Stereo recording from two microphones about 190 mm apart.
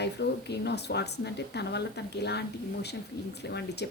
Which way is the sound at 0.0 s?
60° left (ahead or behind).